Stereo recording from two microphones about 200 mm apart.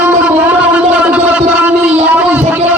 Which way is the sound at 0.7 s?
5° right (ahead or behind).